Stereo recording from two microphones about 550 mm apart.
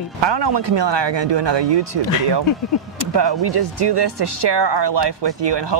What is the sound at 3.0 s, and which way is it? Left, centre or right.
Speech, right.